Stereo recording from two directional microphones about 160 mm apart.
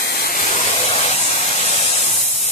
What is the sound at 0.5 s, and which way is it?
Spray, 45° left (ahead or behind).